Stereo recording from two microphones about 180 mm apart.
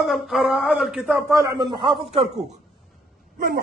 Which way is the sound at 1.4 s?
25° right (ahead or behind).